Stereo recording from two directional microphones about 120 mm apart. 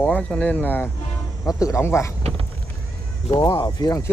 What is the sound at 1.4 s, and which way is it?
Speech, 25° left (ahead or behind).